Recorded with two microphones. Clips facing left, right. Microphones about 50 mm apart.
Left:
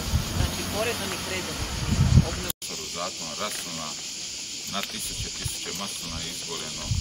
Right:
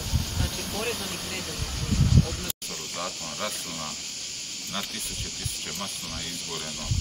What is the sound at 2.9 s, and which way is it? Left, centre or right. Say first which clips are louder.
Speech: left 1 dB; centre.